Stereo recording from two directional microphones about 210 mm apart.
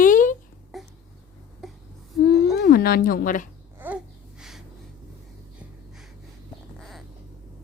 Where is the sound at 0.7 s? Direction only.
Centre (ahead or behind).